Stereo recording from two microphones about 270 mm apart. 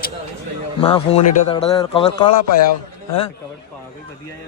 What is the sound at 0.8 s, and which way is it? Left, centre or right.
A man's voice, left.